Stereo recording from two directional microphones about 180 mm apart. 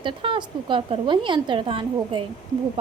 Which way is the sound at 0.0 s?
30° right (ahead or behind).